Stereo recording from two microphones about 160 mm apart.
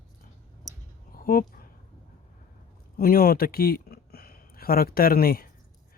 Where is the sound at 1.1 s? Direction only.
60° left (ahead or behind).